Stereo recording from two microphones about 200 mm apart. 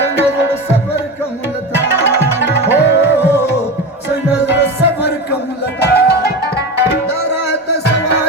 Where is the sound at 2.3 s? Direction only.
60° left (ahead or behind).